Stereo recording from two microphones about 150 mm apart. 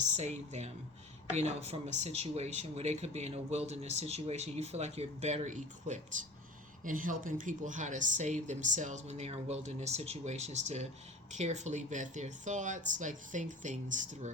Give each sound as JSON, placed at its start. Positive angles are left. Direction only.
{"t": 0.2, "sound": "speech", "side_deg": -50}